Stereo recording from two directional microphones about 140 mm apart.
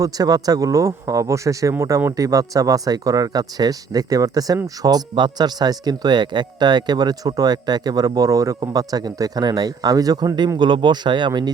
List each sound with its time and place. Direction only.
0.0 s speech: 25° right (ahead or behind)